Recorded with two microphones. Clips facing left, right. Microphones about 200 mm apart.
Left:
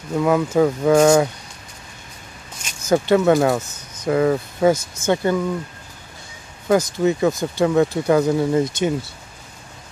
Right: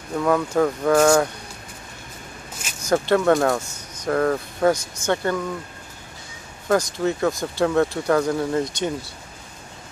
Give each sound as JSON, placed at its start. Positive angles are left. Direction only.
{"t": 0.2, "sound": "speech", "side_deg": 10}
{"t": 2.6, "sound": "speech", "side_deg": 5}
{"t": 6.7, "sound": "speech", "side_deg": 10}